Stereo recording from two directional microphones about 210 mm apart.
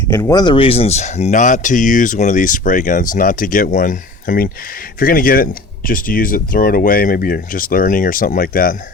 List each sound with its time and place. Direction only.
0.1 s speech: 15° left (ahead or behind); by 8.7 s 45° left (ahead or behind)